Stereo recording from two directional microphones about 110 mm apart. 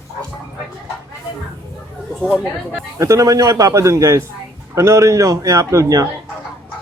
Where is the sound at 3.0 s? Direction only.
30° right (ahead or behind).